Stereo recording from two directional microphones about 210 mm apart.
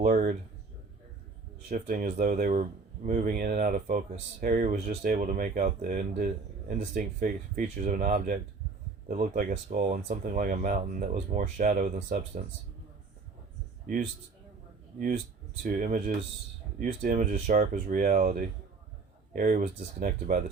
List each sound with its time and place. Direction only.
0.0 s speech: 40° right (ahead or behind)
1.7 s speech: 40° right (ahead or behind)
15.6 s speech: 40° right (ahead or behind)